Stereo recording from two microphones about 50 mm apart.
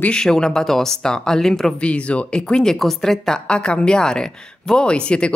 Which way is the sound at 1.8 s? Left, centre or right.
Left.